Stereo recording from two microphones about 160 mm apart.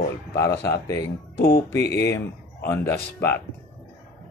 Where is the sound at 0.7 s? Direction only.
20° left (ahead or behind).